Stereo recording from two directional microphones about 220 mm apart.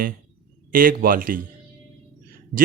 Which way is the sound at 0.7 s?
40° right (ahead or behind).